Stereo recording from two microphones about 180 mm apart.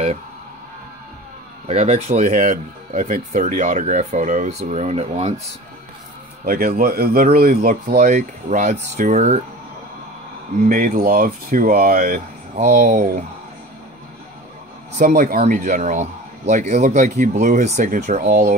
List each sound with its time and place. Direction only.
1.7 s speech: 40° right (ahead or behind)
6.4 s a man's voice: 55° right (ahead or behind); by 9.4 s 40° right (ahead or behind)
10.6 s speech: 45° right (ahead or behind)
15.0 s speech: 45° right (ahead or behind)